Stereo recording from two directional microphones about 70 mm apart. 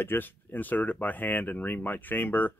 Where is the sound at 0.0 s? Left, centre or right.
Left.